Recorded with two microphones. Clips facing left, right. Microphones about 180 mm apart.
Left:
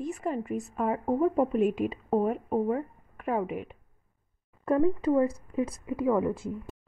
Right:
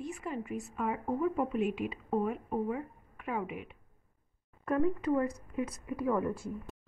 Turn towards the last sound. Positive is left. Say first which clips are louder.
# left 5 dB
turn(degrees=20)  # may be behind; listen again after turning